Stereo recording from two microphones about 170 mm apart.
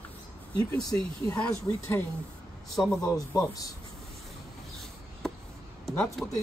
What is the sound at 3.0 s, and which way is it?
Speech, 20° left (ahead or behind).